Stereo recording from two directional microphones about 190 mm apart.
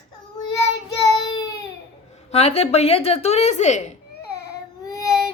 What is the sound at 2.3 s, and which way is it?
A woman's voice, 35° left (ahead or behind).